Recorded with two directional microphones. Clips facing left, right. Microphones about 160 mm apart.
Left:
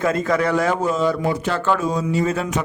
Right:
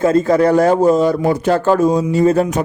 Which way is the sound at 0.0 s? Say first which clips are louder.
Right 7 dB; 30° right (ahead or behind).